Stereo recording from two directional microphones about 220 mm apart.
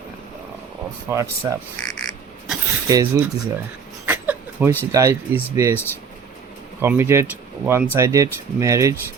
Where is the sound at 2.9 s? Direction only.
15° right (ahead or behind).